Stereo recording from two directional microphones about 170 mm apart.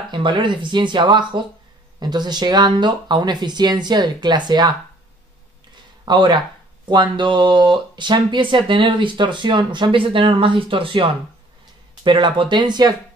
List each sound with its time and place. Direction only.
0.1 s speech: 30° right (ahead or behind)
6.0 s speech: 25° right (ahead or behind)